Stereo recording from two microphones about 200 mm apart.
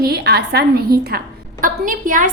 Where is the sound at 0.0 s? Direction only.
50° right (ahead or behind).